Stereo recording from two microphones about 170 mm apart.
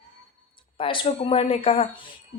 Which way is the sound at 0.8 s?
30° left (ahead or behind).